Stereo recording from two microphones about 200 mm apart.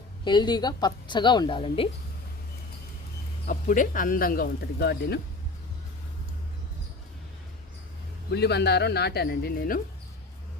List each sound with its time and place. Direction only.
0.3 s a woman's voice: 20° left (ahead or behind)
3.4 s speech: 40° left (ahead or behind)
8.3 s speech: 55° left (ahead or behind)